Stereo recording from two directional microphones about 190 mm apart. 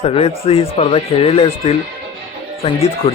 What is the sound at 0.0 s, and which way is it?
Speech, 30° left (ahead or behind).